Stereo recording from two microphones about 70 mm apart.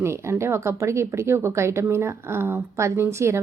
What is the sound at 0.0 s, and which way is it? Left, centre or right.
Speech, right.